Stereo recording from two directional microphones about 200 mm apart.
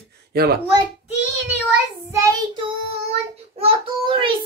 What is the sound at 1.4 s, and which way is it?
Child singing, 10° right (ahead or behind).